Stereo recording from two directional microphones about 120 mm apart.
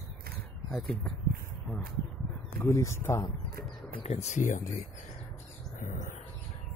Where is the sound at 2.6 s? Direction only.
25° left (ahead or behind).